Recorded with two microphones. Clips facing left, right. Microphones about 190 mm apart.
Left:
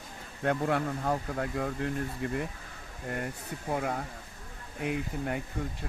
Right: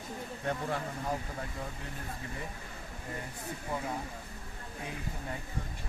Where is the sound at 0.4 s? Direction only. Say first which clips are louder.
Left 7 dB; 65° left (ahead or behind).